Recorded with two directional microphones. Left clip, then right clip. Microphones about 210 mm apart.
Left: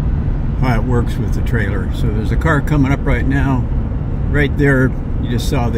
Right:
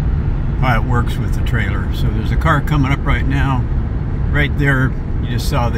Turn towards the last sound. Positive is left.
turn(degrees=0)  # may be behind; listen again after turning